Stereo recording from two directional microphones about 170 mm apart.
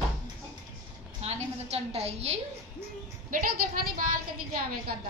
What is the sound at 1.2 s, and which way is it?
A woman's voice, 40° right (ahead or behind).